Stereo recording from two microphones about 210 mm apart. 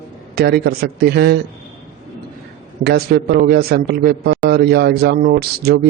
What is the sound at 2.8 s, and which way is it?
A man's voice, 50° right (ahead or behind).